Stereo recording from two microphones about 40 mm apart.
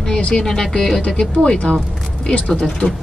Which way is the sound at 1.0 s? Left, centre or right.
Left.